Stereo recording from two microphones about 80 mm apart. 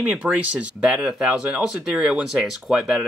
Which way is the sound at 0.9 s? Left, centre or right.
Centre.